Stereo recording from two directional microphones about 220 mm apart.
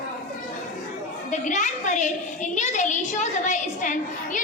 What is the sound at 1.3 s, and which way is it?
A woman's voice, 35° left (ahead or behind).